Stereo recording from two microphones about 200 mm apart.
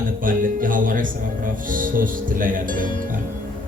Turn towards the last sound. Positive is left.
turn(degrees=-45)  # may be behind; listen again after turning